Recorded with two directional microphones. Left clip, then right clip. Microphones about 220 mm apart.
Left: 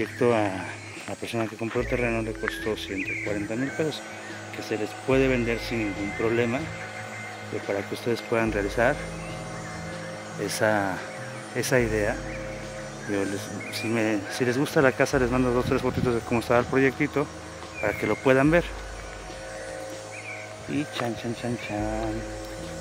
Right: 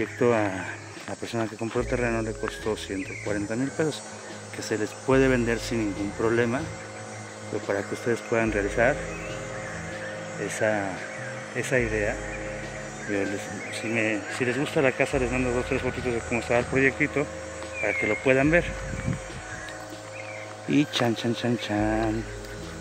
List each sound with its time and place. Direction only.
0.0 s speech: 5° left (ahead or behind)
4.6 s speech: 5° right (ahead or behind)
8.1 s speech: 5° left (ahead or behind)
10.4 s speech: 20° left (ahead or behind)
13.1 s speech: 10° left (ahead or behind)
14.0 s speech: 20° left (ahead or behind)
21.0 s speech: 15° right (ahead or behind)